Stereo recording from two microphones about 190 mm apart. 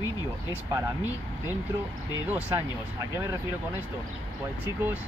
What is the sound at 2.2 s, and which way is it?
Speech, 10° right (ahead or behind).